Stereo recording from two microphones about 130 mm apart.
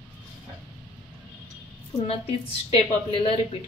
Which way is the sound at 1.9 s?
50° left (ahead or behind).